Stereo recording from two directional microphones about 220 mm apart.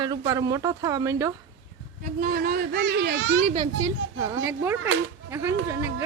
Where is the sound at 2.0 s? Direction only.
40° right (ahead or behind).